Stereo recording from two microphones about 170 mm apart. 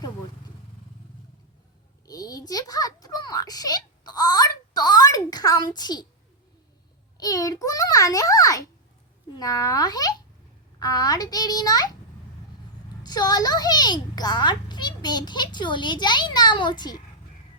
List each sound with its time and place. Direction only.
2.0 s a sound: 20° left (ahead or behind)
7.2 s a child's voice: 20° left (ahead or behind)
13.0 s a child's voice: 25° left (ahead or behind)